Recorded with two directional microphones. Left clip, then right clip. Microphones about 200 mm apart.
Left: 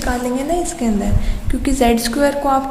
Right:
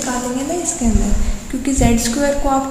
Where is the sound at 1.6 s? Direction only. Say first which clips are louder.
Left 2 dB; 35° left (ahead or behind).